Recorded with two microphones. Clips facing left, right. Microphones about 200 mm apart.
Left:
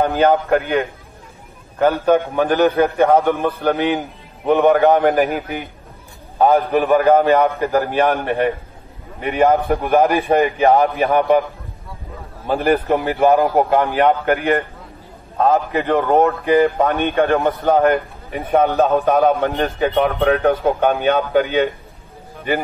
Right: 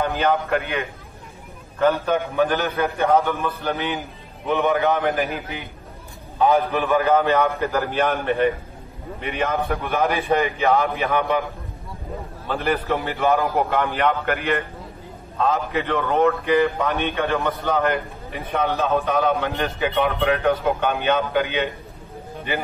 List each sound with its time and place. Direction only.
0.3 s a man's voice: 50° left (ahead or behind)
9.2 s a man's voice: 50° left (ahead or behind)
12.4 s a man's voice: 50° left (ahead or behind)